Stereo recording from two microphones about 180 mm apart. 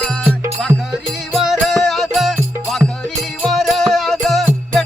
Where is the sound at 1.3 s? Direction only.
Centre (ahead or behind).